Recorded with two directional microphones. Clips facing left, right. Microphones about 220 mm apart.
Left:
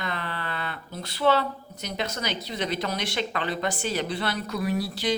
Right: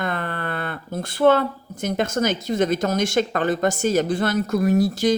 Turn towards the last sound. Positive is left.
turn(degrees=-45)  # may be behind; listen again after turning